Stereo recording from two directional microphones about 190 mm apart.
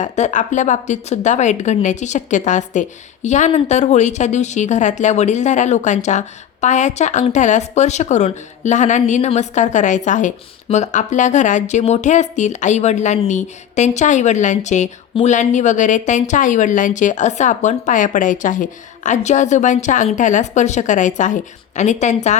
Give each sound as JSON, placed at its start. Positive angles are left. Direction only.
{"t": 0.0, "sound": "a woman's voice", "side_deg": 40}